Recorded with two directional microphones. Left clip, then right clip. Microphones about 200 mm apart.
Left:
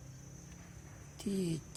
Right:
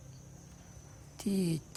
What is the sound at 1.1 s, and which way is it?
Speech, 20° right (ahead or behind).